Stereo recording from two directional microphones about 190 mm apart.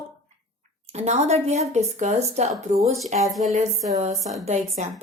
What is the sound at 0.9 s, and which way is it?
Speech, 35° right (ahead or behind).